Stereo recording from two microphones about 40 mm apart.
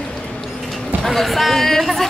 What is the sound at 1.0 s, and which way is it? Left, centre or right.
A woman's voice, centre.